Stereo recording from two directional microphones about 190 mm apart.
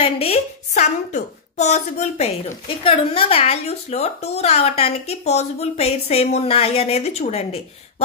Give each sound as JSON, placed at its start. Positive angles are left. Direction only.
{"t": 0.0, "sound": "speech", "side_deg": 30}